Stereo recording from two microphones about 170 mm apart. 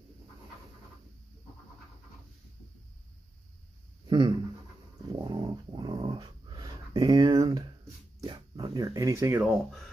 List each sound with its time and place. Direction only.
4.1 s speech: 25° right (ahead or behind)
5.1 s dog: 25° right (ahead or behind)
8.2 s a sound: 25° right (ahead or behind)